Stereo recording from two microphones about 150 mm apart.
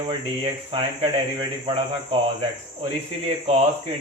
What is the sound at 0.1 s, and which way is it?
Speech, 40° right (ahead or behind).